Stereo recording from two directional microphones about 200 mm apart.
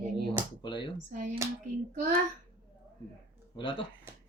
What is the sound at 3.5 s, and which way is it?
Speech, 25° left (ahead or behind).